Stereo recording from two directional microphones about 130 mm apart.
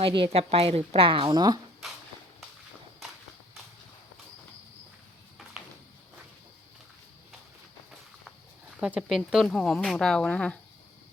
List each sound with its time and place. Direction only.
0.0 s a woman's voice: 40° right (ahead or behind)
8.8 s speech: 5° right (ahead or behind)